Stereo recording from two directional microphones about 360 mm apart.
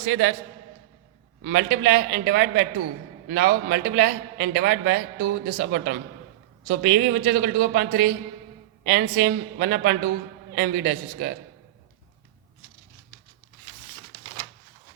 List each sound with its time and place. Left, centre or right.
0.0 s a man's voice: right
1.5 s a man's voice: right